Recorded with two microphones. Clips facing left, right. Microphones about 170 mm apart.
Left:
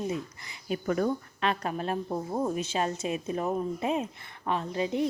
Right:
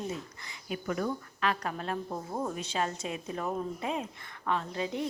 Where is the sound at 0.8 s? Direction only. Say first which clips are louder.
Left 5 dB; 40° left (ahead or behind).